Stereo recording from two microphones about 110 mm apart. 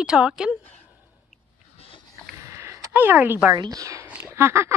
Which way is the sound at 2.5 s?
25° right (ahead or behind).